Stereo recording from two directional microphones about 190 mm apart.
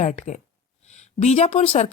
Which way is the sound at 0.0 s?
35° left (ahead or behind).